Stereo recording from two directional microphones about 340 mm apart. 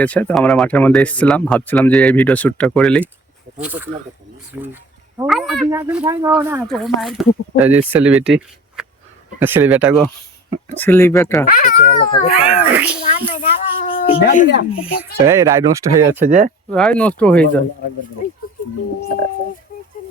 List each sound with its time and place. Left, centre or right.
0.0 s speech: centre
10.8 s speech: centre
11.4 s speech: left
12.4 s speech: centre
13.2 s a sound: centre
14.2 s speech: left
15.2 s speech: centre
16.2 s speech: right
16.6 s speech: centre
18.5 s a sound: left